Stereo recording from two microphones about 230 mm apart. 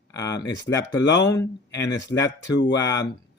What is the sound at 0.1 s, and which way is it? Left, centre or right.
Speech, centre.